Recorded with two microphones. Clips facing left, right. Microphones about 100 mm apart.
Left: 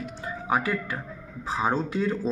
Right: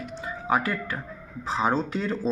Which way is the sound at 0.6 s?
15° left (ahead or behind).